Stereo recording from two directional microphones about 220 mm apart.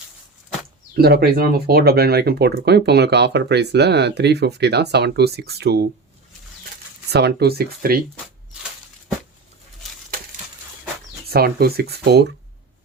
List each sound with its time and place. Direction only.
0.9 s speech: 45° right (ahead or behind)
7.1 s speech: 50° right (ahead or behind)
11.3 s speech: 45° right (ahead or behind)